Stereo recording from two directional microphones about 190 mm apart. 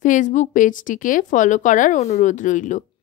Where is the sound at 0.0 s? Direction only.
40° left (ahead or behind).